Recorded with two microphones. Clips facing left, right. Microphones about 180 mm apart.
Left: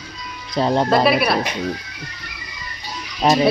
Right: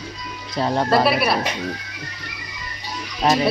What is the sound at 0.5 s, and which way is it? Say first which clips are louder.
Speech: left 3 dB; 20° left (ahead or behind).